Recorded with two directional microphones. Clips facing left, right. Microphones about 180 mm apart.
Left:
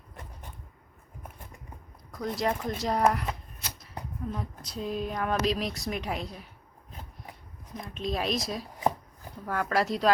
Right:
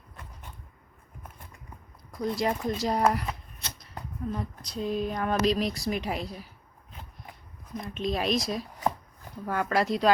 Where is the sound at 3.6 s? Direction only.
10° left (ahead or behind).